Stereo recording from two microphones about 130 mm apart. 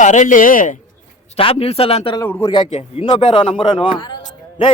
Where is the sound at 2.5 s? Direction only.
45° left (ahead or behind).